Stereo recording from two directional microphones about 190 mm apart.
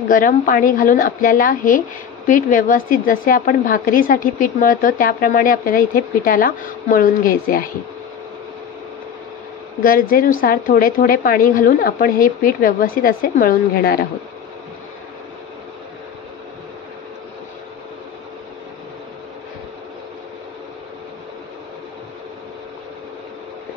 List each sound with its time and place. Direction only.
0.1 s a woman's voice: 45° left (ahead or behind)
9.8 s a woman's voice: 45° left (ahead or behind)